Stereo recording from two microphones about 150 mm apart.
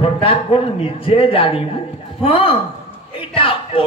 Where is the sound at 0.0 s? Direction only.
35° left (ahead or behind).